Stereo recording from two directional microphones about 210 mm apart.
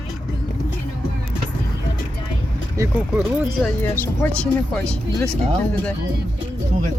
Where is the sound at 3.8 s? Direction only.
10° left (ahead or behind).